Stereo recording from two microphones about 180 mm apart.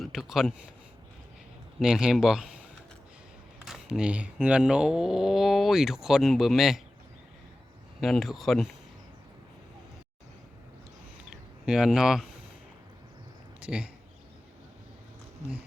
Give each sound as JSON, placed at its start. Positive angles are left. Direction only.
{"t": 0.0, "sound": "speech", "side_deg": 0}
{"t": 1.8, "sound": "speech", "side_deg": -5}
{"t": 3.7, "sound": "speech", "side_deg": -5}
{"t": 8.0, "sound": "speech", "side_deg": 0}
{"t": 11.6, "sound": "speech", "side_deg": -5}
{"t": 13.7, "sound": "speech", "side_deg": -5}